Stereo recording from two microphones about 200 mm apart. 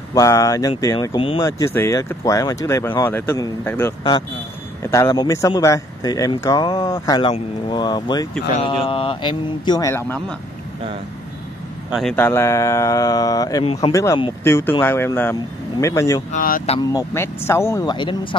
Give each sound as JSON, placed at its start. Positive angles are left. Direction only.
{"t": 0.1, "sound": "speech", "side_deg": 15}
{"t": 1.6, "sound": "speech", "side_deg": 15}
{"t": 4.9, "sound": "speech", "side_deg": 20}
{"t": 11.9, "sound": "speech", "side_deg": 0}
{"t": 16.3, "sound": "speech", "side_deg": 45}
{"t": 16.9, "sound": "speech", "side_deg": 10}